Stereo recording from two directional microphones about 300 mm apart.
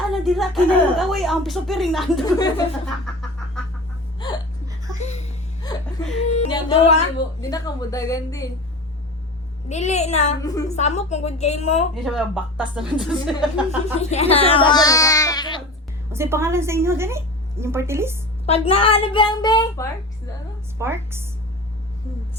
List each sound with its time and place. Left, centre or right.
0.1 s a woman's voice: centre
4.2 s whimper: centre
4.9 s giggle: left
5.7 s whimper: centre
6.2 s a woman's voice: left
9.6 s a woman's voice: left
11.9 s a woman's voice: centre
14.0 s a woman's voice: left
16.1 s a woman's voice: centre
18.4 s a woman's voice: left
20.7 s a woman's voice: centre